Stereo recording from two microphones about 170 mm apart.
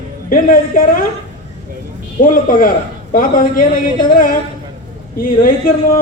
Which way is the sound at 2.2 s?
55° left (ahead or behind).